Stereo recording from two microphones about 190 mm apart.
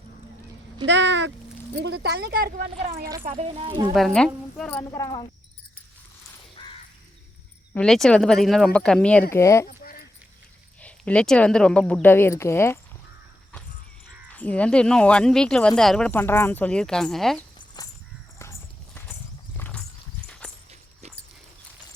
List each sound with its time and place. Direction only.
0.9 s speech: 65° right (ahead or behind); by 3.0 s 50° right (ahead or behind)
3.2 s speech: 35° right (ahead or behind)
3.9 s speech: centre (ahead or behind); by 5.3 s 25° left (ahead or behind)
6.6 s crow: 20° left (ahead or behind)
7.7 s speech: 5° left (ahead or behind)
9.3 s speech: 15° left (ahead or behind)
9.6 s dog: 50° left (ahead or behind)
10.8 s speech: 5° left (ahead or behind)
14.3 s speech: 5° left (ahead or behind)
19.5 s clip-clop: 10° left (ahead or behind)
20.2 s horse: 5° left (ahead or behind)